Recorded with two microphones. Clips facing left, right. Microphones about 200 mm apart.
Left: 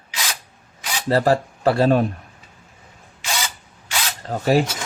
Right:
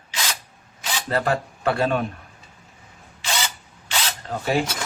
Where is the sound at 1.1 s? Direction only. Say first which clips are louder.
Left 6 dB; 35° left (ahead or behind).